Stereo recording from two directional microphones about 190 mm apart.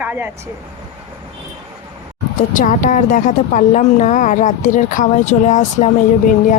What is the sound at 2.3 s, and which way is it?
A woman's voice, 45° left (ahead or behind).